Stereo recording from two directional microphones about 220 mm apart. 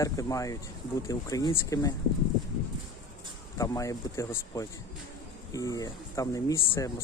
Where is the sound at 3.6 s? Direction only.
15° left (ahead or behind).